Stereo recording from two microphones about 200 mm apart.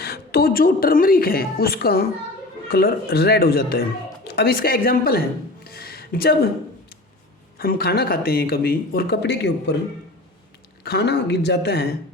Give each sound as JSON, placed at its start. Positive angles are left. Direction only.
{"t": 0.0, "sound": "speech", "side_deg": 50}
{"t": 5.6, "sound": "music", "side_deg": 50}
{"t": 7.6, "sound": "speech", "side_deg": 50}
{"t": 10.8, "sound": "a man's voice", "side_deg": 55}